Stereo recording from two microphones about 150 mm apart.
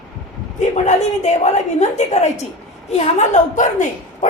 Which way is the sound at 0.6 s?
50° left (ahead or behind).